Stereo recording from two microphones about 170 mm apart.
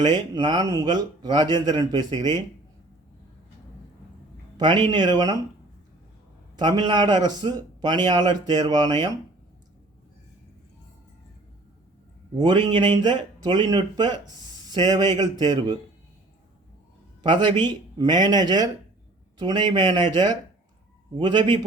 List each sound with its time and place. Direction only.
0.0 s speech: 25° right (ahead or behind)
4.5 s a man's voice: 25° right (ahead or behind)
6.6 s speech: 25° right (ahead or behind)
12.4 s speech: 25° right (ahead or behind)
17.2 s speech: 25° right (ahead or behind)